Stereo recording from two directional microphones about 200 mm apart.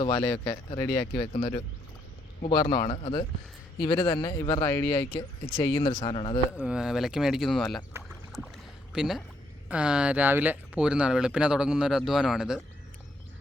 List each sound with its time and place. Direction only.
0.0 s speech: 20° left (ahead or behind)
6.6 s speech: 5° right (ahead or behind)
8.9 s speech: centre (ahead or behind)